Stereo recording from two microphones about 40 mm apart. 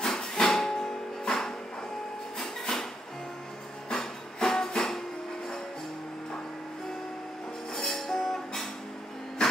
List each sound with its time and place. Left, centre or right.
0.0 s music: centre
3.9 s music: centre
7.7 s music: centre
9.4 s a sound: centre